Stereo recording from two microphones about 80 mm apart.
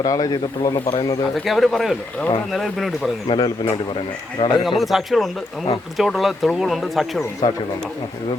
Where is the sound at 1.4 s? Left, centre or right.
Centre.